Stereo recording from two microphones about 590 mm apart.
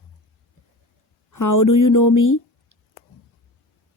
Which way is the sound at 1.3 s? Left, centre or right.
Left.